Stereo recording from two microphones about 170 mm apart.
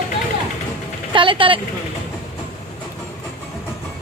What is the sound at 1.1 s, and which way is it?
Speech, 30° right (ahead or behind).